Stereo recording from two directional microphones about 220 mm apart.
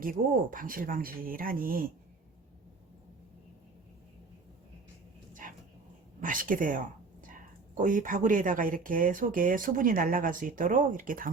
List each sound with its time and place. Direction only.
0.0 s speech: 40° right (ahead or behind)
5.3 s dog: 35° right (ahead or behind)
6.1 s speech: 40° right (ahead or behind)